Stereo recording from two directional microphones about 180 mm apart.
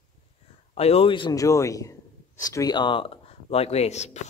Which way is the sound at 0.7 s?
35° left (ahead or behind).